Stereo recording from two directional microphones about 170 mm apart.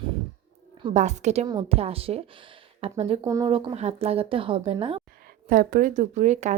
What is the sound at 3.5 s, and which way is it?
Speech, 35° right (ahead or behind).